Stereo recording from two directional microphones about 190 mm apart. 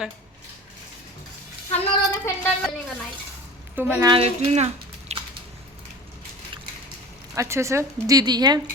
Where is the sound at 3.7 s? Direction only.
10° right (ahead or behind).